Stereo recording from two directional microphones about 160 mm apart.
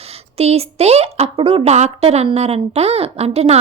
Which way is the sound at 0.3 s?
40° right (ahead or behind).